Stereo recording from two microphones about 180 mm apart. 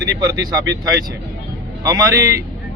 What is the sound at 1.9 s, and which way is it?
Speech, 20° right (ahead or behind).